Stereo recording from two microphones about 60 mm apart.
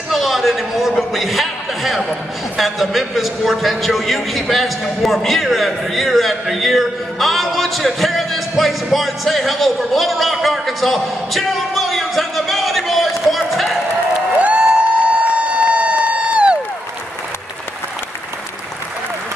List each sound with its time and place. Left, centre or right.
0.1 s a man's voice: centre
13.3 s run: centre
14.4 s a sound: right